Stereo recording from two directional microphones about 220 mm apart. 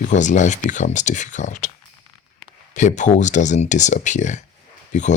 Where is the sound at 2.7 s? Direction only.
35° left (ahead or behind).